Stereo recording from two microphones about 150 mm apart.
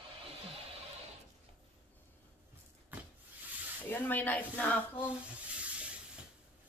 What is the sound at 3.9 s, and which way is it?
Speech, 10° left (ahead or behind).